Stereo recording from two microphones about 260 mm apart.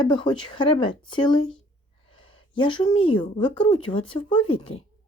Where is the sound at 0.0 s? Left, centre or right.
Centre.